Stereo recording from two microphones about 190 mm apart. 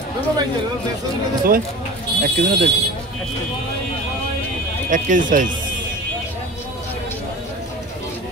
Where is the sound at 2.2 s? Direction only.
50° right (ahead or behind).